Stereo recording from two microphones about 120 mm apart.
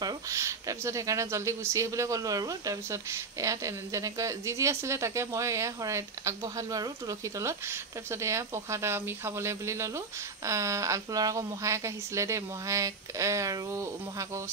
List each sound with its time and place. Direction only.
0.0 s speech: 25° right (ahead or behind)